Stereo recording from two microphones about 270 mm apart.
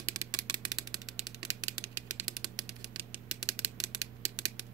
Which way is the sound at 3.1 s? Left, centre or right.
Centre.